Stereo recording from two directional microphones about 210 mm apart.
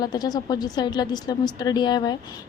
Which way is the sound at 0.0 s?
20° left (ahead or behind).